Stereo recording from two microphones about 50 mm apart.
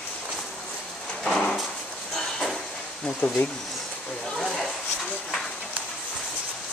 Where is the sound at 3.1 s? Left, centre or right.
Left.